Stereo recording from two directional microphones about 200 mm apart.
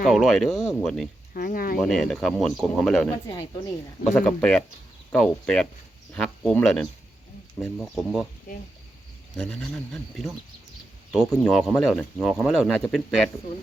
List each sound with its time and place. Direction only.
0.0 s speech: centre (ahead or behind)
1.3 s speech: 45° left (ahead or behind)
1.8 s speech: centre (ahead or behind)
9.4 s speech: 5° left (ahead or behind)